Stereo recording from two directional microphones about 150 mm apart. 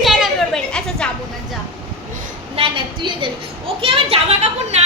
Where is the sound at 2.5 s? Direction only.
35° right (ahead or behind).